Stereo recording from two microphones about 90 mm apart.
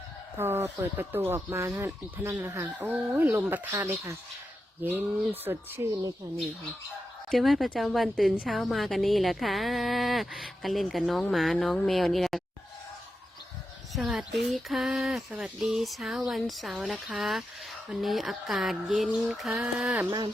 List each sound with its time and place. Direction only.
0.3 s speech: 25° right (ahead or behind)
2.9 s speech: 20° right (ahead or behind)
7.3 s a woman's voice: centre (ahead or behind)
13.9 s a woman's voice: 5° right (ahead or behind)
19.6 s a sound: 10° right (ahead or behind)
20.1 s a sound: 60° right (ahead or behind)